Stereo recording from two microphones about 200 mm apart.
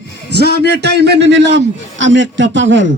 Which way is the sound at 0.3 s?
55° right (ahead or behind).